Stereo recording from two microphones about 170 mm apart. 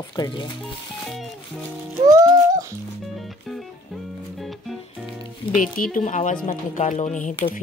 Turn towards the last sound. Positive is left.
turn(degrees=45)  # may be behind; listen again after turning